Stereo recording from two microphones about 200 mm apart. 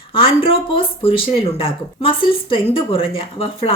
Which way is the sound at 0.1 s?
25° left (ahead or behind).